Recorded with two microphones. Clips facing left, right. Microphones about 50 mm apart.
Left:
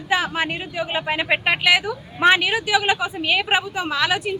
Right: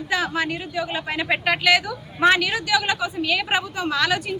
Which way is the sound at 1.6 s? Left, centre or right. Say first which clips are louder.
Left 1 dB; centre.